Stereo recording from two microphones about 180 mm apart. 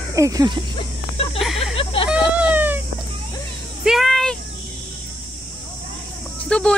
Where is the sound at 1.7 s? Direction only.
30° left (ahead or behind).